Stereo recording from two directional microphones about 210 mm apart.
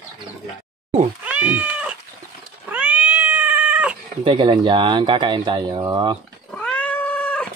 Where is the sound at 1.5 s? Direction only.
5° right (ahead or behind).